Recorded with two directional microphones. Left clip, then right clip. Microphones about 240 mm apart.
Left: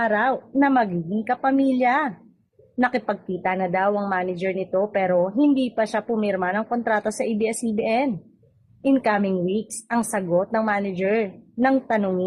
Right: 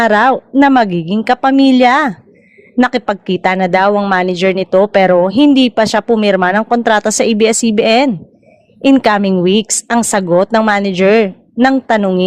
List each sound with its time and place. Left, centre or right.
0.0 s a woman's voice: right